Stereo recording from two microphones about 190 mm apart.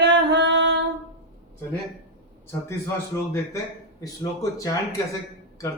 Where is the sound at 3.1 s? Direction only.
15° left (ahead or behind).